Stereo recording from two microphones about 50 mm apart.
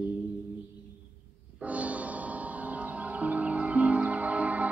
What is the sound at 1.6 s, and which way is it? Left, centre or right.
Music, right.